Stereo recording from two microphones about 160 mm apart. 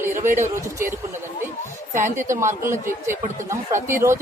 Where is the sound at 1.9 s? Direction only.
55° right (ahead or behind).